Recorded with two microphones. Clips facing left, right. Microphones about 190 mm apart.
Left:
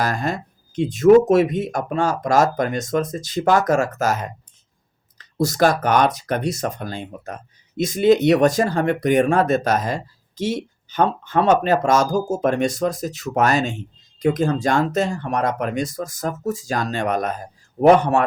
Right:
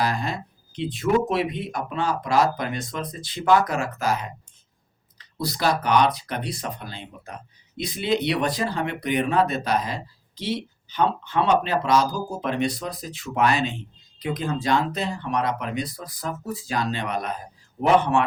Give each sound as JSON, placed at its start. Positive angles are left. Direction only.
{"t": 0.0, "sound": "speech", "side_deg": 45}